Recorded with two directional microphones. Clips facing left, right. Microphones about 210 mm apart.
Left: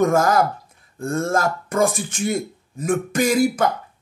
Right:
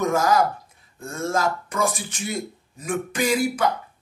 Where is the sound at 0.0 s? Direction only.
50° left (ahead or behind).